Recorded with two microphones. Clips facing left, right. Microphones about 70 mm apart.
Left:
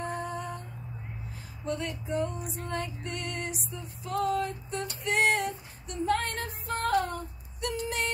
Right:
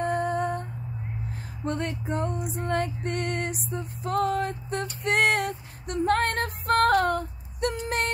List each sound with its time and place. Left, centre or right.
0.0 s humming: right
1.6 s music: right